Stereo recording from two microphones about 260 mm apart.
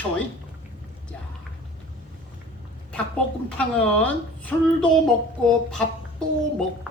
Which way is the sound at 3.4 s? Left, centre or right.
Centre.